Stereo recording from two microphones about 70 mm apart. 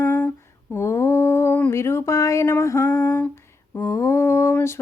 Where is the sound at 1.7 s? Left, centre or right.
Left.